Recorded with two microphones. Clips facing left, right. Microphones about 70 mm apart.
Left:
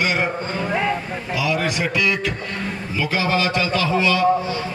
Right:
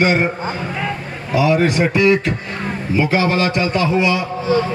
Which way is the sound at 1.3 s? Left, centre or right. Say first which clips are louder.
Right 8 dB; right.